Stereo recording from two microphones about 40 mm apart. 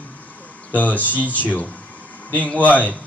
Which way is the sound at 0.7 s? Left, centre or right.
Left.